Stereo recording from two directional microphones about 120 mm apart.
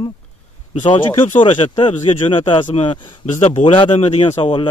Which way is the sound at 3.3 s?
55° left (ahead or behind).